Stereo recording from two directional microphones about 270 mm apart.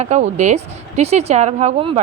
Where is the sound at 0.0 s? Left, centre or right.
Right.